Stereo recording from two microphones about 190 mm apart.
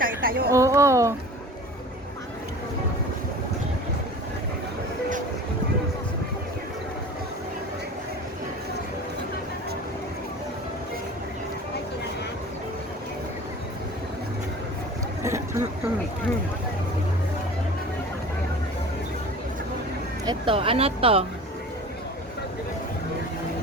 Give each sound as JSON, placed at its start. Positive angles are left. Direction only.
{"t": 0.2, "sound": "a woman's voice", "side_deg": -50}
{"t": 0.5, "sound": "speech", "side_deg": -15}
{"t": 15.2, "sound": "a sound", "side_deg": -15}
{"t": 20.2, "sound": "speech", "side_deg": -25}